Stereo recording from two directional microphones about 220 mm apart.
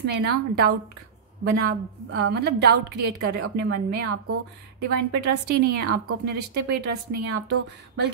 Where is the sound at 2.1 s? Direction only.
50° right (ahead or behind).